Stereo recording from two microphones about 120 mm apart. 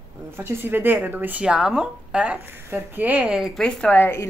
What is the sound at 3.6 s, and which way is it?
Speech, 5° left (ahead or behind).